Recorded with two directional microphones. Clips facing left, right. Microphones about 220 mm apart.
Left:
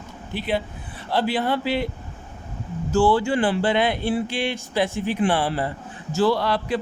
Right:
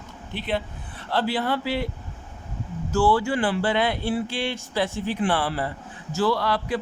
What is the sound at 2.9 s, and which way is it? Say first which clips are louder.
A man's voice: left 2 dB; 25° left (ahead or behind).